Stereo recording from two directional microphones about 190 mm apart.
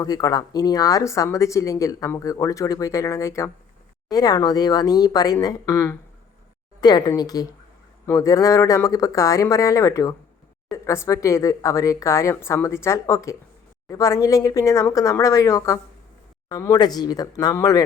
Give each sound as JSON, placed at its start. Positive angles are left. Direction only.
{"t": 0.0, "sound": "speech", "side_deg": 20}